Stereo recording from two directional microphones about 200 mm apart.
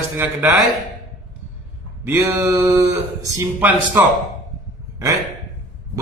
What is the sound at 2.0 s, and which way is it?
A man's voice, 15° right (ahead or behind).